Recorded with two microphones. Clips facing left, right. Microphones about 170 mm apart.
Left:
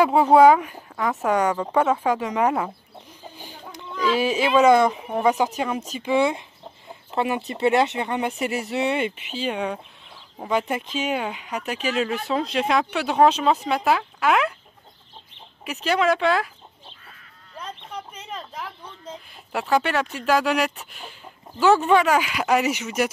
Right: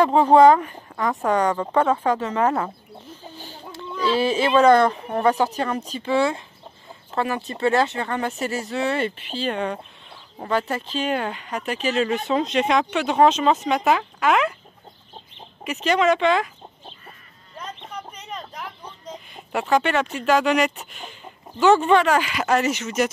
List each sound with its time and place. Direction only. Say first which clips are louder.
0.0 s speech: right 1 dB; 10° left (ahead or behind)
15.8 s speech: right 2 dB; 5° left (ahead or behind)
19.3 s speech: right 1 dB; centre (ahead or behind)